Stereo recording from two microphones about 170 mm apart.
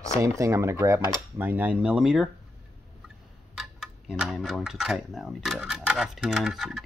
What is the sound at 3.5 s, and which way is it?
Speech, 5° right (ahead or behind).